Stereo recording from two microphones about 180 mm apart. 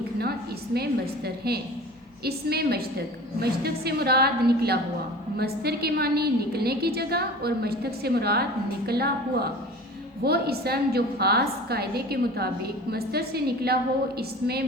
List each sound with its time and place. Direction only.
0.2 s a woman's voice: 60° right (ahead or behind)